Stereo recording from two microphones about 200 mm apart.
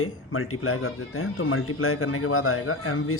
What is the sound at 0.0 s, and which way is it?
Speech, 90° left.